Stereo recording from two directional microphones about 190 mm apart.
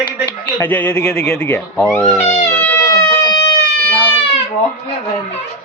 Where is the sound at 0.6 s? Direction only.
10° left (ahead or behind).